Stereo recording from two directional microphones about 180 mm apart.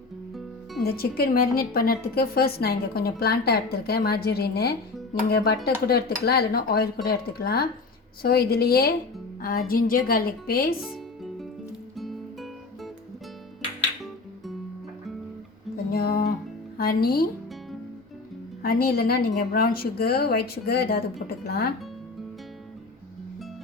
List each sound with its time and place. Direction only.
0.8 s a woman's voice: 60° left (ahead or behind)
5.9 s a woman's voice: 60° left (ahead or behind)
10.8 s music: centre (ahead or behind)
15.9 s music: 60° left (ahead or behind)
16.7 s speech: 55° left (ahead or behind)
18.6 s a woman's voice: 55° left (ahead or behind)